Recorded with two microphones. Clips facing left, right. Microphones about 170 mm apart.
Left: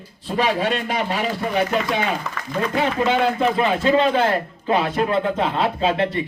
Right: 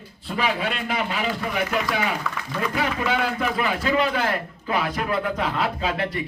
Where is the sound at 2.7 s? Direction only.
25° left (ahead or behind).